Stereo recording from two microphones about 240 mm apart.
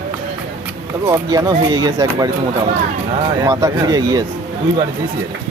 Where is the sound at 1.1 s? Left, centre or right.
Centre.